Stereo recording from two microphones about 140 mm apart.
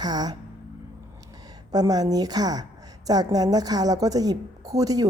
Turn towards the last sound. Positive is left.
turn(degrees=-25)  # may be behind; listen again after turning